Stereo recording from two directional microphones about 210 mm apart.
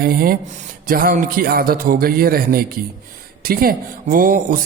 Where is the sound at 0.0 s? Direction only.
45° right (ahead or behind).